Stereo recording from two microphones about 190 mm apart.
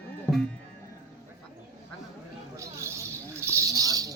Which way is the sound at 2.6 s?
15° right (ahead or behind).